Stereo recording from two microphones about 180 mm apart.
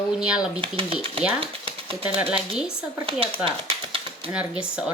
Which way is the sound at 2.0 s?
5° right (ahead or behind).